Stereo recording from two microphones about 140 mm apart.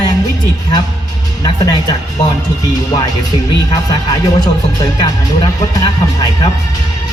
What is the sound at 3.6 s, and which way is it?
Speech, 30° left (ahead or behind).